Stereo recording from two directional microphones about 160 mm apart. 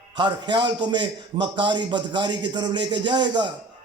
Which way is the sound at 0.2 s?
30° right (ahead or behind).